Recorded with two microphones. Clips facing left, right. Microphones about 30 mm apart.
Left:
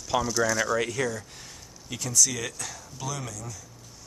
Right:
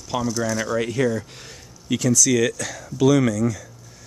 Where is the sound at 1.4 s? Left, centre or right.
Right.